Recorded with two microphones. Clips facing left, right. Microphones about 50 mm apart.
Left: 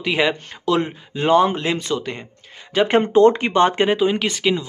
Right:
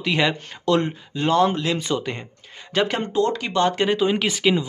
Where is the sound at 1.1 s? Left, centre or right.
Centre.